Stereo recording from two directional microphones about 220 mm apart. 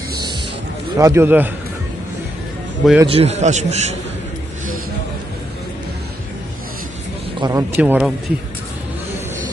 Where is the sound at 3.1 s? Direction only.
30° right (ahead or behind).